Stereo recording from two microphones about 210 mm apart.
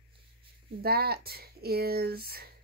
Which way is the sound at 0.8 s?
45° right (ahead or behind).